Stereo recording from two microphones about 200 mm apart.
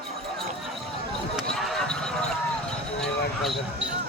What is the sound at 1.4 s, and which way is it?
Basketball bounce, centre (ahead or behind).